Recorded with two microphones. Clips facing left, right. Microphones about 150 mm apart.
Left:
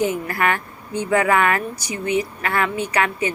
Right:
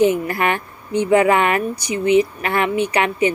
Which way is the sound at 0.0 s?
20° right (ahead or behind).